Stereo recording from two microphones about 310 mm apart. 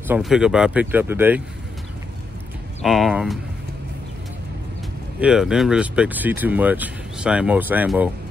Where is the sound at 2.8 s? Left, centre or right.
Centre.